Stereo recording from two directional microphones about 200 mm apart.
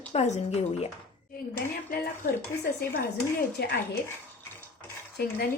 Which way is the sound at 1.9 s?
50° left (ahead or behind).